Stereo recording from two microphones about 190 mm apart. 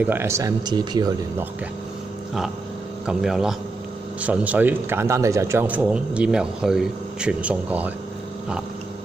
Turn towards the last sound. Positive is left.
turn(degrees=-5)  # may be behind; listen again after turning